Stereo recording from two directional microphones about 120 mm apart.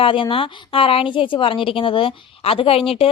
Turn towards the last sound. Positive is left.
turn(degrees=50)  # may be behind; listen again after turning